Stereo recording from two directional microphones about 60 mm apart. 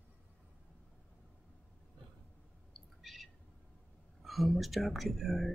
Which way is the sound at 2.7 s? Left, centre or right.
Centre.